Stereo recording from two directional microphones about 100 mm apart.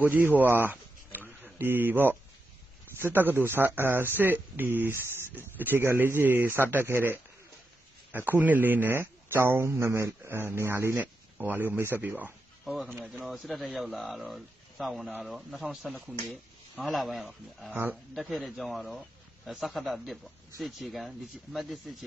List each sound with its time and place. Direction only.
0.0 s speech: 20° right (ahead or behind)
13.3 s speech: centre (ahead or behind)